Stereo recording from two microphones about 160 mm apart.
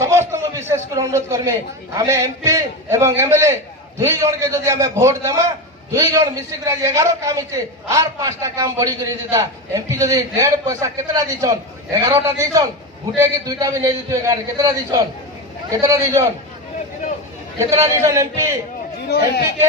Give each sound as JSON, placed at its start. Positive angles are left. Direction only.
{"t": 0.0, "sound": "a man's voice", "side_deg": -15}
{"t": 17.6, "sound": "a man's voice", "side_deg": -20}
{"t": 19.0, "sound": "speech", "side_deg": 90}